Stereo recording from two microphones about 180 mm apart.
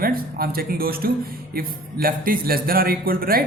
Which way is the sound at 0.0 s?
55° right (ahead or behind).